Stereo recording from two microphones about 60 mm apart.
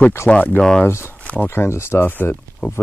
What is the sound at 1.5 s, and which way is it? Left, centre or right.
Speech, left.